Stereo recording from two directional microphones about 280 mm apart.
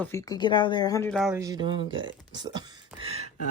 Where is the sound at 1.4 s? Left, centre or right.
Centre.